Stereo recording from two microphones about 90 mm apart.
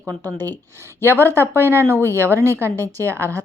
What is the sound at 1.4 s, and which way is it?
A woman's voice, 25° right (ahead or behind).